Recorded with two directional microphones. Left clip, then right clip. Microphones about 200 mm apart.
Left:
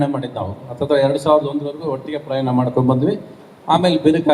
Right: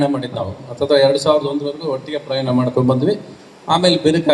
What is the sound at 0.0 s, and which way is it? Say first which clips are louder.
A man's voice: right 2 dB; 45° right (ahead or behind).